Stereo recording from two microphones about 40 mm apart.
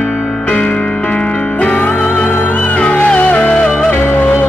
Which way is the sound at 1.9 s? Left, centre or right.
Left.